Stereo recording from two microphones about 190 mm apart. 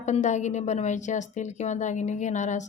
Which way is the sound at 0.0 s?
40° left (ahead or behind).